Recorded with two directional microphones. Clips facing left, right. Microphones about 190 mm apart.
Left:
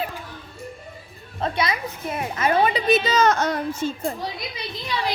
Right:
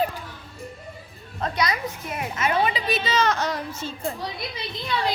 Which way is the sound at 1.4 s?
25° left (ahead or behind).